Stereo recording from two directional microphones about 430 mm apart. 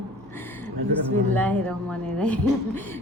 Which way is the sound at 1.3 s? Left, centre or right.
Centre.